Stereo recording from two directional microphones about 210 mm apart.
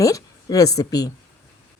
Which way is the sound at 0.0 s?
15° left (ahead or behind).